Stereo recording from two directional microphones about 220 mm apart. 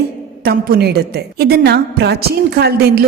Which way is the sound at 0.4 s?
45° right (ahead or behind).